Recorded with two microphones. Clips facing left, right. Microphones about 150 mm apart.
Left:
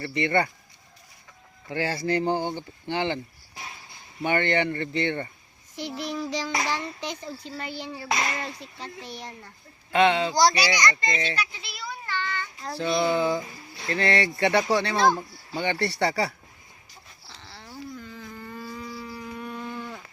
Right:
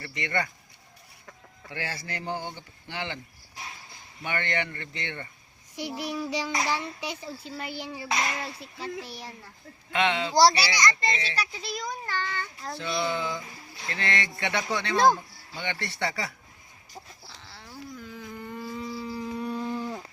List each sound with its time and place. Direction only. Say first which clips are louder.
0.0 s speech: left 7 dB; 30° left (ahead or behind)
1.7 s speech: left 10 dB; 30° left (ahead or behind)
4.2 s speech: left 7 dB; 30° left (ahead or behind)
5.7 s a child's voice: left 1 dB; 10° right (ahead or behind)
9.9 s speech: left 6 dB; 35° left (ahead or behind)
10.3 s a child's voice: right 1 dB; 30° right (ahead or behind)
11.3 s child singing: right 1 dB; 40° right (ahead or behind)
12.7 s speech: left 6 dB; 40° left (ahead or behind)
17.2 s chicken: left 2 dB; centre (ahead or behind)
17.9 s a sound: even; 10° right (ahead or behind); by 20.1 s 30° right (ahead or behind)